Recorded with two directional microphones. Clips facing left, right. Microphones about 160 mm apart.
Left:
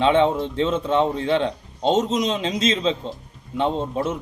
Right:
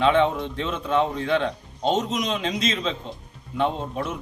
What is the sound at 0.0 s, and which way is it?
A man's voice, 25° left (ahead or behind).